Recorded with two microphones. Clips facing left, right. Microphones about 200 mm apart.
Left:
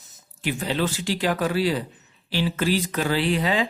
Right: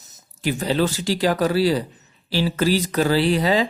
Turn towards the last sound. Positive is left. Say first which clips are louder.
# right 4 dB
turn(degrees=-35)  # may be behind; listen again after turning